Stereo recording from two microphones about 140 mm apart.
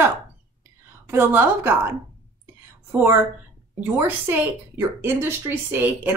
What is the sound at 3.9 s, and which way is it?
Speech, 15° right (ahead or behind).